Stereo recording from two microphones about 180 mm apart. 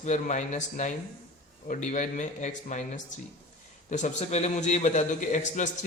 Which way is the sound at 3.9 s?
40° left (ahead or behind).